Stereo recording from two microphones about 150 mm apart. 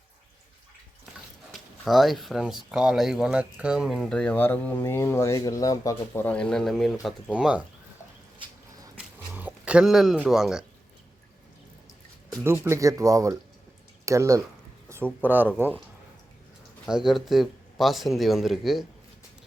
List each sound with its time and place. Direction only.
1.5 s speech: centre (ahead or behind)
9.0 s a sound: 10° right (ahead or behind)
12.6 s speech: 20° right (ahead or behind)
16.9 s speech: centre (ahead or behind)